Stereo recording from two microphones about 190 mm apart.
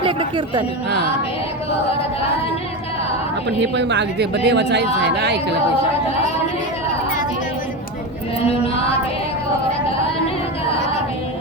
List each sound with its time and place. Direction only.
0.0 s speech: 25° right (ahead or behind)
3.6 s speech: 65° right (ahead or behind)
8.4 s chant: 30° left (ahead or behind)